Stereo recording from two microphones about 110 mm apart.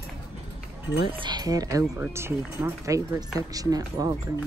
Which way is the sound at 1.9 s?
20° right (ahead or behind).